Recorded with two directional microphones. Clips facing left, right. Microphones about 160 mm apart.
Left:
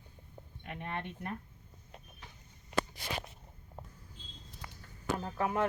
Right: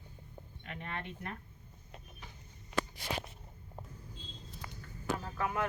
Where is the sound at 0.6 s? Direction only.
10° left (ahead or behind).